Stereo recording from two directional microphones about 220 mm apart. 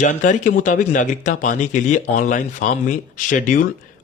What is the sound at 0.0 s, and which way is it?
Speech, 35° left (ahead or behind).